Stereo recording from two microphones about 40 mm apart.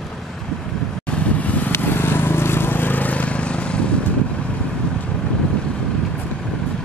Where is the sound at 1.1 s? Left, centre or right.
Left.